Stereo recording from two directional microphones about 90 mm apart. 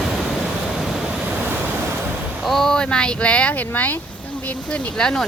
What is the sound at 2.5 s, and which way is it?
Speech, 5° left (ahead or behind).